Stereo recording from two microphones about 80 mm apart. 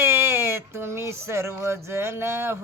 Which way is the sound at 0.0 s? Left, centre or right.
Right.